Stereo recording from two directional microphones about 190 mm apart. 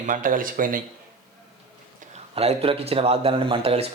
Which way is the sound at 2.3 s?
30° right (ahead or behind).